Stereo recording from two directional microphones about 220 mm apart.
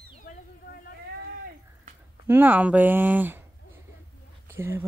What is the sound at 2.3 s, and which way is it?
Speech, 10° right (ahead or behind).